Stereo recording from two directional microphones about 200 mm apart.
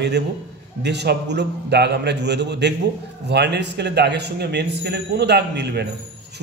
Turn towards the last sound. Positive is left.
turn(degrees=-55)  # may be behind; listen again after turning